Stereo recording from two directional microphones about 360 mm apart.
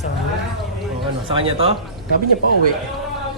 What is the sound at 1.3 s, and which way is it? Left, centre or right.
Speech, centre.